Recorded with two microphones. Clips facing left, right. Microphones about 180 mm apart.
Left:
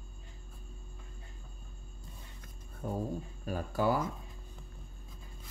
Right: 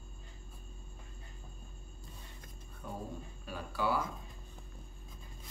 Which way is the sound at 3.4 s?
45° left (ahead or behind).